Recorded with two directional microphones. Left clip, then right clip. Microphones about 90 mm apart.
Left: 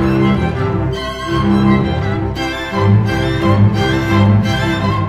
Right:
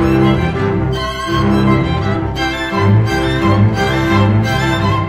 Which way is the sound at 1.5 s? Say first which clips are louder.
Left 1 dB; 40° right (ahead or behind).